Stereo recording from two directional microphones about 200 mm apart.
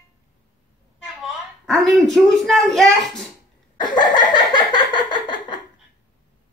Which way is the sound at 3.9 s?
20° left (ahead or behind).